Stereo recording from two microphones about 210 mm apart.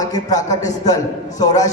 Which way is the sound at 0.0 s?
20° left (ahead or behind).